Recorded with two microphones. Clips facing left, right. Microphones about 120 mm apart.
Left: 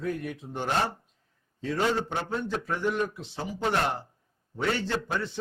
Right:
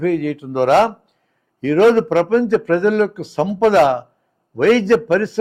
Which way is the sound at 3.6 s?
90° right.